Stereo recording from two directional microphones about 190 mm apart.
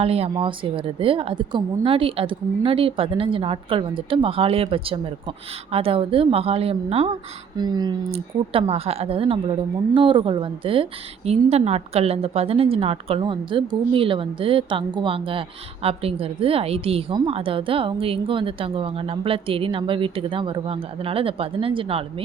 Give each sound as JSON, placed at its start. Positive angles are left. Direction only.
{"t": 0.0, "sound": "a woman's voice", "side_deg": -30}